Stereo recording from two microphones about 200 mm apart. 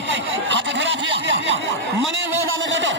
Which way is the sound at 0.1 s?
65° right (ahead or behind).